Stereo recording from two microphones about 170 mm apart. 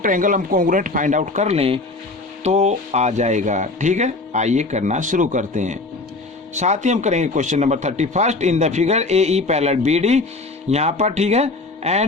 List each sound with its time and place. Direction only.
0.0 s a man's voice: 50° right (ahead or behind)